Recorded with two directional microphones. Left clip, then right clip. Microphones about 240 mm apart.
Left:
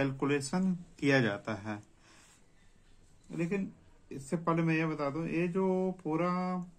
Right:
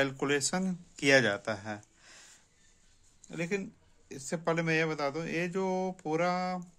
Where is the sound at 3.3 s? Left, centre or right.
Right.